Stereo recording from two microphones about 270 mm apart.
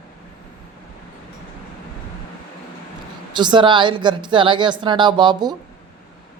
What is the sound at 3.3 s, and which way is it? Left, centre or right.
Speech, centre.